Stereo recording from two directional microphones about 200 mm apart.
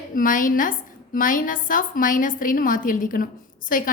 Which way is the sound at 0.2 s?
40° left (ahead or behind).